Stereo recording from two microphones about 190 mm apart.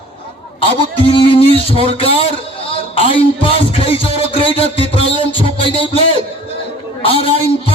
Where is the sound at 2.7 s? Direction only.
30° left (ahead or behind).